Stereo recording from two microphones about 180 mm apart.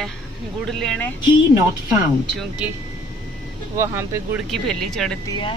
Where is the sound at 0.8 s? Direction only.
Centre (ahead or behind).